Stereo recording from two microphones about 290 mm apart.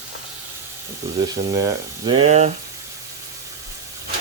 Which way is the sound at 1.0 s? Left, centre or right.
Centre.